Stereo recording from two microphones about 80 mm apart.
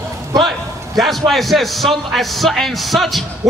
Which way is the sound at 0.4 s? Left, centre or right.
Centre.